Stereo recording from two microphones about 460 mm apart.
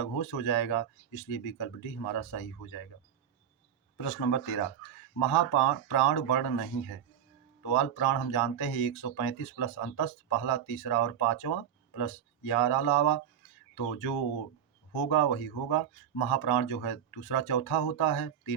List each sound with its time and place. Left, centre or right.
0.0 s speech: left
3.9 s speech: left